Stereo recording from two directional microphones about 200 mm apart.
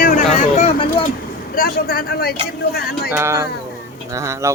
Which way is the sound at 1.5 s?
45° left (ahead or behind).